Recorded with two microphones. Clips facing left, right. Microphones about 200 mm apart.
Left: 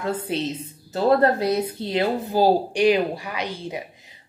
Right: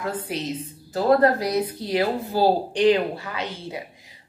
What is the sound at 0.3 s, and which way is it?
A woman's voice, 25° left (ahead or behind).